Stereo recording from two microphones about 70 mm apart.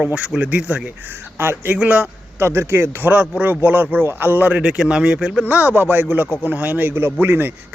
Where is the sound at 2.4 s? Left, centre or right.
Right.